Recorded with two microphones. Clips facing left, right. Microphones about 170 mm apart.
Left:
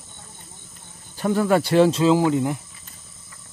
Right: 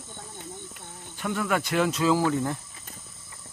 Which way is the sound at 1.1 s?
35° left (ahead or behind).